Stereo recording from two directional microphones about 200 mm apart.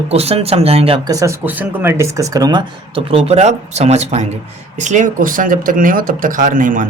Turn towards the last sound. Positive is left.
turn(degrees=-45)  # may be behind; listen again after turning